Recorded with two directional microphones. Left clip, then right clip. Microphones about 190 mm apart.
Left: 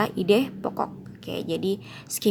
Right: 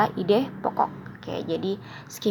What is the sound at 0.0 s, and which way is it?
A woman's voice, 40° left (ahead or behind).